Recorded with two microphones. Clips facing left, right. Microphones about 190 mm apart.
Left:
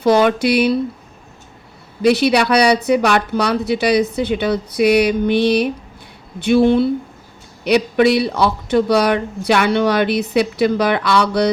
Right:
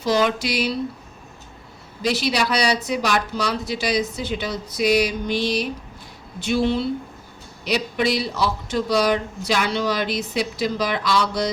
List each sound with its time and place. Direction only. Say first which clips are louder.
0.0 s speech: left 7 dB; 60° left (ahead or behind)
2.0 s speech: left 8 dB; 60° left (ahead or behind)